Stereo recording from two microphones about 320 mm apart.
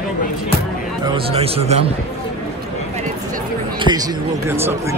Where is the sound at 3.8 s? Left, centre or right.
Centre.